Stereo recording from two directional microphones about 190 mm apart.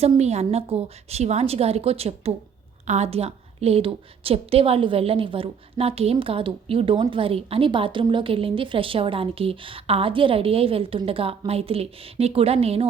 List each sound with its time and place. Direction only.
0.0 s a woman's voice: 35° right (ahead or behind)